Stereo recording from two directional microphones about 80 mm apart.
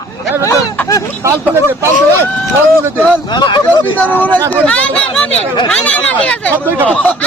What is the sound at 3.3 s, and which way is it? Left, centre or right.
Speech, left.